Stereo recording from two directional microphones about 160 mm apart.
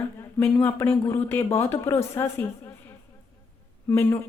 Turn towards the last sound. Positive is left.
turn(degrees=15)  # may be behind; listen again after turning